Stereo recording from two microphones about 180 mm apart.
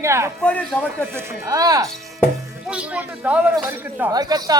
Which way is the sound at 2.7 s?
5° right (ahead or behind).